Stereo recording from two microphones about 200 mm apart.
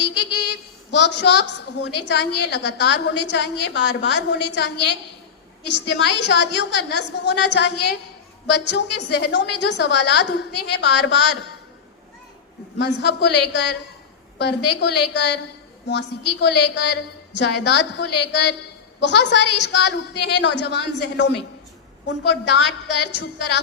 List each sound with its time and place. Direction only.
0.0 s a woman's voice: 60° left (ahead or behind)
12.8 s a woman's voice: 60° left (ahead or behind)